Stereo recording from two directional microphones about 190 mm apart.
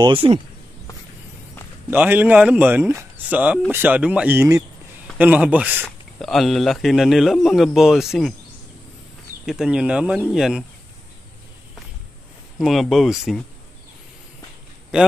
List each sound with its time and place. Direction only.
0.0 s speech: 30° right (ahead or behind)
1.9 s speech: 10° right (ahead or behind)
9.5 s speech: 5° right (ahead or behind)
12.5 s speech: centre (ahead or behind)